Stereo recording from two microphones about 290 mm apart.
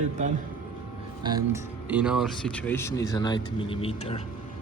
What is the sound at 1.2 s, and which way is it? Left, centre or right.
Speech, centre.